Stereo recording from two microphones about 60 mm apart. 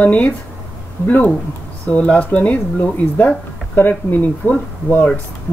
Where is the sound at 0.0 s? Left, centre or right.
Left.